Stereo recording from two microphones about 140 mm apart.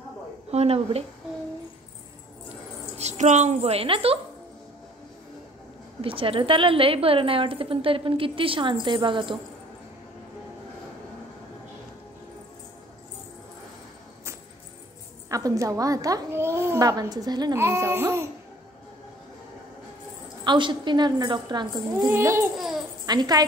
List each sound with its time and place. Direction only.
0.5 s a woman's voice: 50° right (ahead or behind)
3.0 s a woman's voice: 55° right (ahead or behind)
5.9 s a woman's voice: 40° right (ahead or behind)
15.2 s a woman's voice: 25° right (ahead or behind)
20.4 s a woman's voice: 35° right (ahead or behind)
22.1 s a child's voice: 20° right (ahead or behind)
22.6 s a child's voice: centre (ahead or behind)
23.0 s a woman's voice: 30° right (ahead or behind)